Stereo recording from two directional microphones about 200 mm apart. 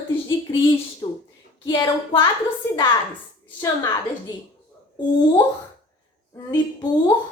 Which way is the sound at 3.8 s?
20° left (ahead or behind).